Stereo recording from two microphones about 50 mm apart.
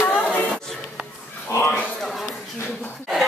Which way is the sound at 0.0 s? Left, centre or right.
Left.